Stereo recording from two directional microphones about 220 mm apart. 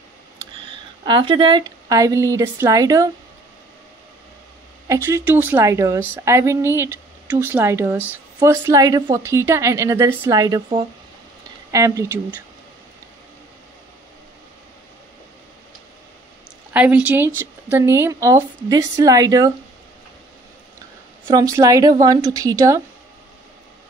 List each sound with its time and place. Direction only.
0.7 s a woman's voice: 20° right (ahead or behind)
4.8 s a woman's voice: 15° right (ahead or behind)
16.7 s a woman's voice: 5° right (ahead or behind)
21.3 s a woman's voice: 15° right (ahead or behind)